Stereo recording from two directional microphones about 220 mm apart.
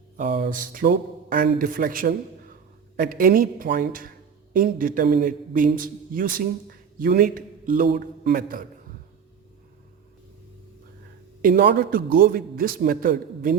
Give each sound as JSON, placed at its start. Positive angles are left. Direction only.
{"t": 0.2, "sound": "a man's voice", "side_deg": -40}
{"t": 11.4, "sound": "a man's voice", "side_deg": -45}